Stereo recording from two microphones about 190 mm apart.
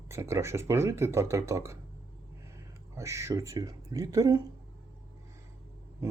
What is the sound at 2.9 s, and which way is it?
Speech, 15° right (ahead or behind).